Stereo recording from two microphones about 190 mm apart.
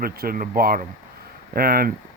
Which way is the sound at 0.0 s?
50° right (ahead or behind).